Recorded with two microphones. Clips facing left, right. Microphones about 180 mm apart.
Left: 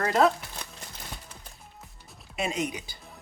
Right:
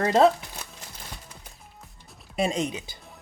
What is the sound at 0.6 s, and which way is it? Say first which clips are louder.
Music: even; 5° right (ahead or behind).